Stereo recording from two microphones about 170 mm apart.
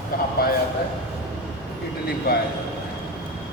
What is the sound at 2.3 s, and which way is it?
Speech, 65° left (ahead or behind).